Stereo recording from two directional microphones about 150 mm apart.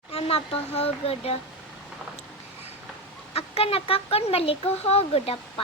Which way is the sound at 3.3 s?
40° left (ahead or behind).